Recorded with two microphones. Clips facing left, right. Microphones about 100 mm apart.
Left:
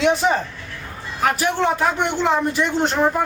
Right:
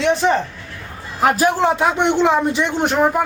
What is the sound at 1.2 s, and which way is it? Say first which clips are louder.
Speech: right 4 dB; 30° right (ahead or behind).